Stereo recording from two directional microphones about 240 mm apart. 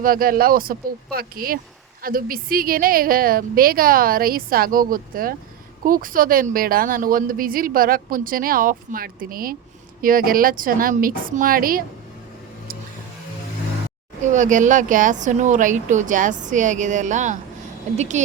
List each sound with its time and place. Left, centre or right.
0.0 s a woman's voice: right
14.2 s a woman's voice: right